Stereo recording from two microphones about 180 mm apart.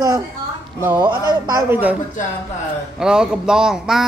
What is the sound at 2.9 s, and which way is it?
Speech, 5° right (ahead or behind).